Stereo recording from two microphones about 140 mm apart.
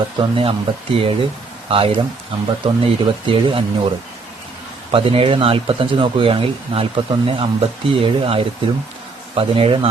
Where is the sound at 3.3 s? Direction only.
40° right (ahead or behind).